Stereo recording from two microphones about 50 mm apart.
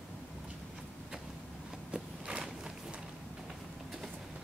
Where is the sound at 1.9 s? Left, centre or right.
Centre.